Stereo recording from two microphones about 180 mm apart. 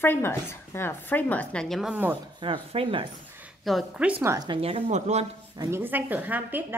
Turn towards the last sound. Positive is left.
turn(degrees=-10)  # may be behind; listen again after turning